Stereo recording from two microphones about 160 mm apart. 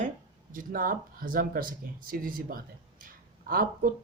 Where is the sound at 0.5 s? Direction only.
60° right (ahead or behind).